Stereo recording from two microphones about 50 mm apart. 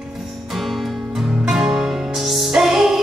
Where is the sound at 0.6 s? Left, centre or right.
Centre.